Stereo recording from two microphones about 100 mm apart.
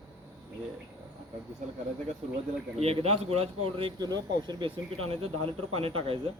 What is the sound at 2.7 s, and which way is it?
Speech, 90° right.